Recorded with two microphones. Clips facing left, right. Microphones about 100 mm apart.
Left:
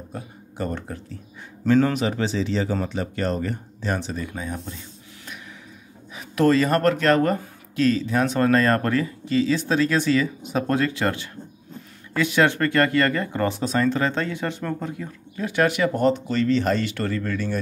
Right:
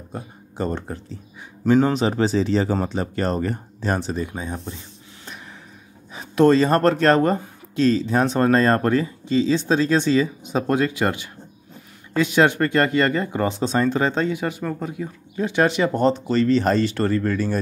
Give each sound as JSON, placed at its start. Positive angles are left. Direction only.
{"t": 0.1, "sound": "a man's voice", "side_deg": -25}
{"t": 2.0, "sound": "speech", "side_deg": -35}
{"t": 4.2, "sound": "speech", "side_deg": -25}
{"t": 6.1, "sound": "speech", "side_deg": -25}
{"t": 15.3, "sound": "speech", "side_deg": -25}